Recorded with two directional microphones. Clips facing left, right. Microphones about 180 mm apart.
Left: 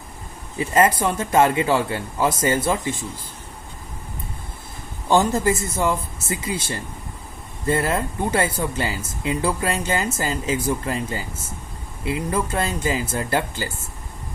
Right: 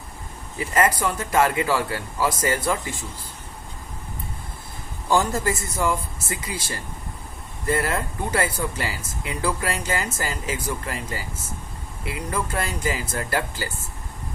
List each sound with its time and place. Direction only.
0.6 s speech: 25° left (ahead or behind)
5.0 s speech: 20° left (ahead or behind)